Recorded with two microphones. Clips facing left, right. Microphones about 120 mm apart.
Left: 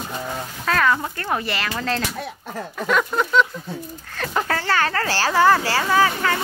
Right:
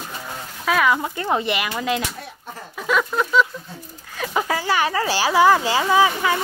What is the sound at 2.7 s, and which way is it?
A child's voice, centre (ahead or behind).